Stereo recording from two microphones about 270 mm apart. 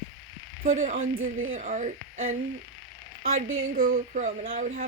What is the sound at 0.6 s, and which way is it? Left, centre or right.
A woman's voice, right.